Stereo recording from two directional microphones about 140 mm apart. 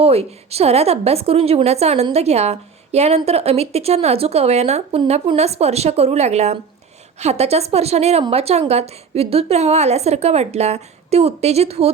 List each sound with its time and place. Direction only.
0.0 s a woman's voice: 45° right (ahead or behind)